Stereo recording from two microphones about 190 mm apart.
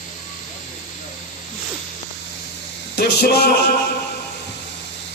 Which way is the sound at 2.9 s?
60° left (ahead or behind).